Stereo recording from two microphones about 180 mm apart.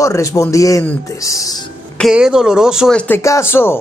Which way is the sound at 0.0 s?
15° left (ahead or behind).